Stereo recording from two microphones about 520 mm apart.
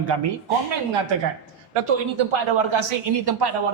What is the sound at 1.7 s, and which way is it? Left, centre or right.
Speech, right.